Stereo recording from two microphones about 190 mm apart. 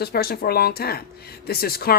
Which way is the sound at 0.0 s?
55° left (ahead or behind).